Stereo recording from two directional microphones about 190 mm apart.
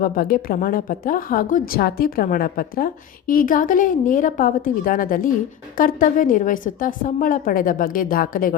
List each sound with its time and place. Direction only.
0.0 s a woman's voice: 50° left (ahead or behind)